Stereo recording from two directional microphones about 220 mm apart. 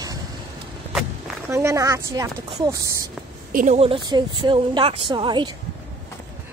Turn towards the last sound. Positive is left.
turn(degrees=-20)  # may be behind; listen again after turning